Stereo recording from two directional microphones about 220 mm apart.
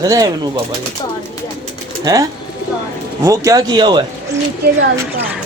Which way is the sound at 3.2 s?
15° right (ahead or behind).